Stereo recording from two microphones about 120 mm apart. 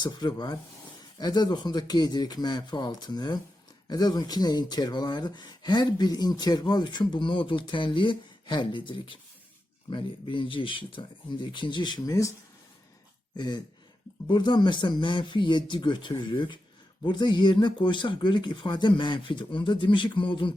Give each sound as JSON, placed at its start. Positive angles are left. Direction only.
{"t": 0.0, "sound": "speech", "side_deg": 35}
{"t": 13.3, "sound": "speech", "side_deg": 35}